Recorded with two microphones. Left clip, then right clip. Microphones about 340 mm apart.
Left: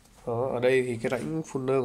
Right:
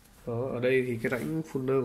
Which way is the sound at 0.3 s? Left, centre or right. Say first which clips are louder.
Left 4 dB; left.